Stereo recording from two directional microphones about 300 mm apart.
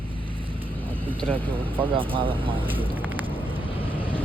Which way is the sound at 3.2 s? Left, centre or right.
Centre.